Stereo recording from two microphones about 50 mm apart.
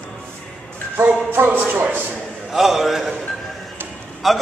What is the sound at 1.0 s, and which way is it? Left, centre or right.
Speech, right.